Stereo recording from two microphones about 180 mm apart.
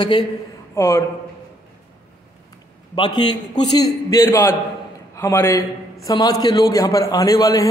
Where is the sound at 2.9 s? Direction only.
25° left (ahead or behind).